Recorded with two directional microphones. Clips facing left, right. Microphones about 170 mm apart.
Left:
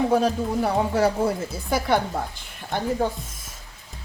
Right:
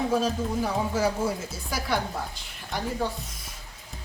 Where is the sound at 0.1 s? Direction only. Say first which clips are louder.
Left 4 dB; 65° left (ahead or behind).